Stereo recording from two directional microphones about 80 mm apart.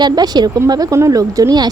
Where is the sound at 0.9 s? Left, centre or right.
Right.